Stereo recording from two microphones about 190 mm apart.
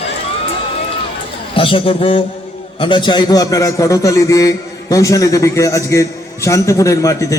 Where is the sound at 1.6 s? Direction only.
25° left (ahead or behind).